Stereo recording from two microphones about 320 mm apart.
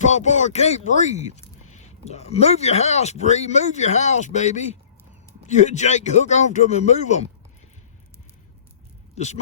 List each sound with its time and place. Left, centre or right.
0.0 s speech: left
9.1 s speech: left